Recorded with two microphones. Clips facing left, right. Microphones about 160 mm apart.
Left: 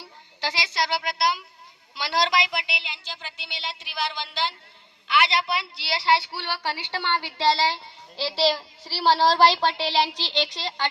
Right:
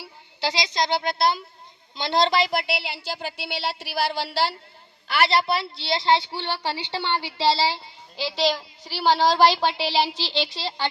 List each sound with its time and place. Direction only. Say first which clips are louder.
0.4 s a woman's voice: right 3 dB; 20° right (ahead or behind)
2.6 s a woman's voice: right 8 dB; 5° right (ahead or behind)
5.0 s a woman's voice: right 2 dB; 35° right (ahead or behind); by 7.8 s 10° right (ahead or behind)
8.2 s speech: even; centre (ahead or behind)
10.2 s speech: right 1 dB; 20° left (ahead or behind)